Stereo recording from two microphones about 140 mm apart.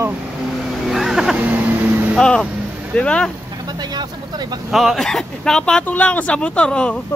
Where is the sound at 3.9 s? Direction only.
30° right (ahead or behind).